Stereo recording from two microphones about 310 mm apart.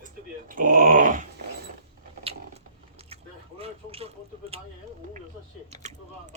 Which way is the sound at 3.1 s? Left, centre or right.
Centre.